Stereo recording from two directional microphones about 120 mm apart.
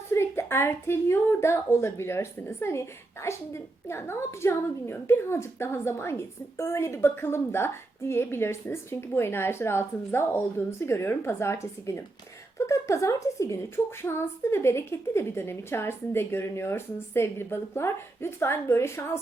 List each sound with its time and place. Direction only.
0.1 s a woman's voice: 20° left (ahead or behind)